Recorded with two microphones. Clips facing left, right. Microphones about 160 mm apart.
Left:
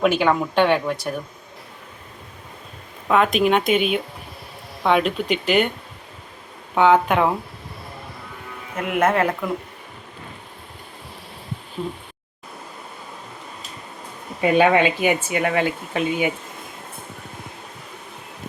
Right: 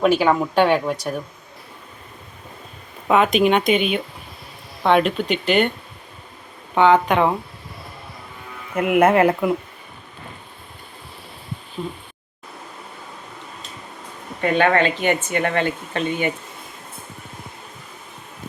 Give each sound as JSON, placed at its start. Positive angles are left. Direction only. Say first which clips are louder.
{"t": 0.2, "sound": "speech", "louder": "right 1 dB", "side_deg": -5}
{"t": 3.1, "sound": "speech", "louder": "right 1 dB", "side_deg": 0}
{"t": 6.7, "sound": "speech", "louder": "right 1 dB", "side_deg": 5}
{"t": 8.7, "sound": "speech", "louder": "right 5 dB", "side_deg": -5}
{"t": 14.4, "sound": "speech", "louder": "left 2 dB", "side_deg": 10}